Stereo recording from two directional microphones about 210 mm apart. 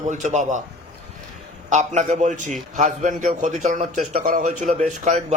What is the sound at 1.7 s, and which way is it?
A man's voice, 35° right (ahead or behind).